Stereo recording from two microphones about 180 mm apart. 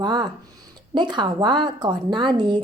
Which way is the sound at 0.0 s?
25° right (ahead or behind).